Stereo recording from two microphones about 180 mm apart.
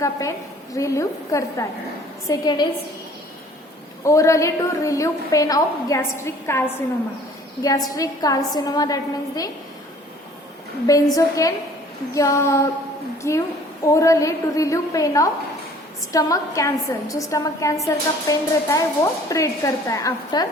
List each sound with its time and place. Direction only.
0.0 s a woman's voice: 20° left (ahead or behind)
4.0 s a woman's voice: 15° left (ahead or behind)
7.9 s a woman's voice: 20° left (ahead or behind)
10.8 s a woman's voice: 20° left (ahead or behind)